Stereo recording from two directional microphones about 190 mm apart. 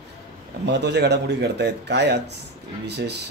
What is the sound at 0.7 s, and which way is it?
Speech, 60° right (ahead or behind).